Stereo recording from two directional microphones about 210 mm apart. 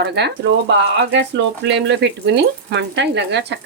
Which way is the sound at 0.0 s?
55° right (ahead or behind).